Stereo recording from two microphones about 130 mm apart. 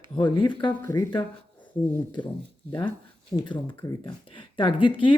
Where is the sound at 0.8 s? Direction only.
20° left (ahead or behind).